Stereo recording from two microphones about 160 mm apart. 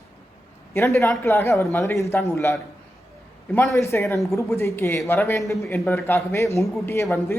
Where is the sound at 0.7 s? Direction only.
15° left (ahead or behind).